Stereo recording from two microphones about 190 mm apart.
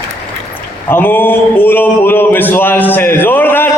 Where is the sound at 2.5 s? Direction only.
10° left (ahead or behind).